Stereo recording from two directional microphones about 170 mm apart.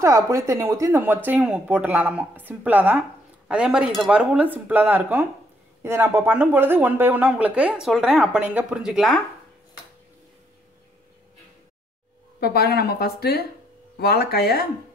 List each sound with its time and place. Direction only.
0.0 s speech: 20° right (ahead or behind); by 9.2 s centre (ahead or behind)
12.4 s speech: 70° left (ahead or behind)